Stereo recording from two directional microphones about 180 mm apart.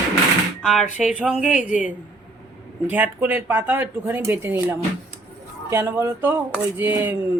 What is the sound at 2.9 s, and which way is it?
Speech, 10° right (ahead or behind).